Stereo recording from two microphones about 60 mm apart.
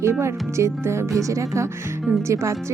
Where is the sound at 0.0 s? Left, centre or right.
Right.